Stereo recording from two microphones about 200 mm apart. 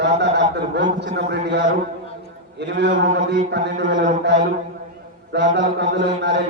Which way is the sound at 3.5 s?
60° right (ahead or behind).